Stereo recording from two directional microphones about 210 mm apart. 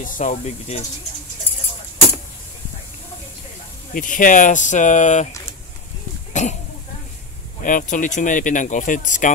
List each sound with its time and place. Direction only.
0.1 s speech: 35° left (ahead or behind)
3.9 s speech: 40° left (ahead or behind)
6.4 s speech: 35° left (ahead or behind)
7.6 s speech: 40° left (ahead or behind)